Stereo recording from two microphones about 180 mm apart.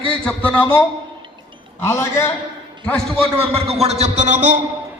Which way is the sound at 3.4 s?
35° right (ahead or behind).